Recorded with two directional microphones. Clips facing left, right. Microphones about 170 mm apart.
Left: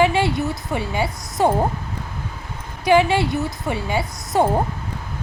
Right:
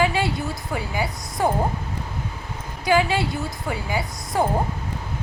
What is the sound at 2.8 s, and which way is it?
A woman's voice, 20° left (ahead or behind).